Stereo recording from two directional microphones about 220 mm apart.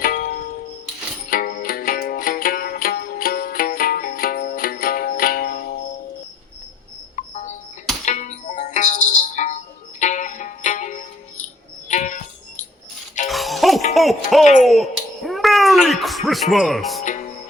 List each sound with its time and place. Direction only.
0.0 s music: 40° left (ahead or behind)
7.2 s cricket: 35° left (ahead or behind)
8.0 s music: 35° left (ahead or behind)
13.2 s music: centre (ahead or behind)
14.6 s a sound: centre (ahead or behind)
17.0 s music: 35° left (ahead or behind)